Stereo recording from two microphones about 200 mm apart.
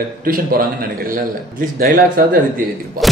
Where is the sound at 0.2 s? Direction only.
45° right (ahead or behind).